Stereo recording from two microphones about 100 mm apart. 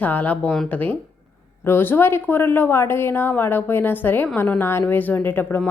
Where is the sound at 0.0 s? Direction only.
15° left (ahead or behind).